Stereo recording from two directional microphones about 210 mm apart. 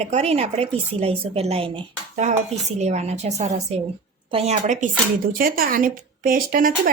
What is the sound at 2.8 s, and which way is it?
A woman's voice, 30° right (ahead or behind).